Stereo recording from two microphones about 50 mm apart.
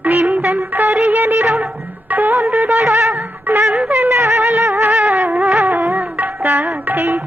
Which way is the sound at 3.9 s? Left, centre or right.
Right.